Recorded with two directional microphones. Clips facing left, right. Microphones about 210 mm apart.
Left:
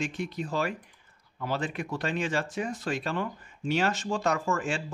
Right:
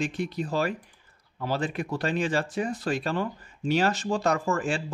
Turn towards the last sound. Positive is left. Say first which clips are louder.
# right 3 dB
turn(degrees=-35)  # may be behind; listen again after turning